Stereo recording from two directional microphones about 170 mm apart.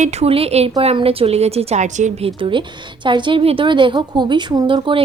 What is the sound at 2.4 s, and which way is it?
A woman's voice, 30° right (ahead or behind).